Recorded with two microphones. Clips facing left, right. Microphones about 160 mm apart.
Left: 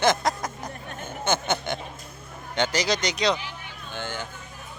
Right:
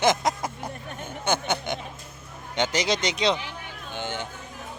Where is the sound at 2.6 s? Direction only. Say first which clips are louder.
Even; 20° right (ahead or behind).